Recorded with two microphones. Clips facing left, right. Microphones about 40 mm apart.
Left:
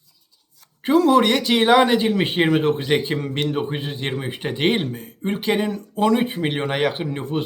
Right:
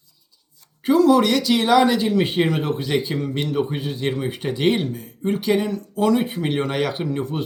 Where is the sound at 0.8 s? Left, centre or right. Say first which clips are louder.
Even; left.